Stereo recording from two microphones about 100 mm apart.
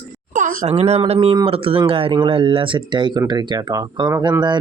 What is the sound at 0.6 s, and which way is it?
Speech, 90° right.